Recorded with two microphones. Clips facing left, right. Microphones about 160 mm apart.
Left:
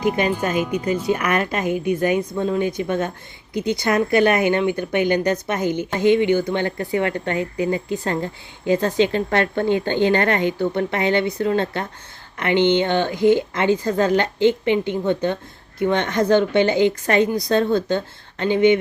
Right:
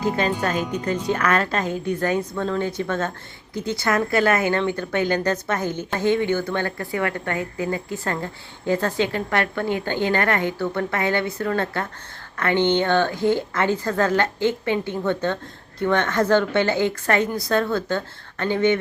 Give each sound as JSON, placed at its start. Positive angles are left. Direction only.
{"t": 0.0, "sound": "a woman's voice", "side_deg": 15}